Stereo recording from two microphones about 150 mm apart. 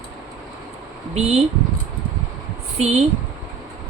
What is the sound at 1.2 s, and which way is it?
Speech, 45° right (ahead or behind).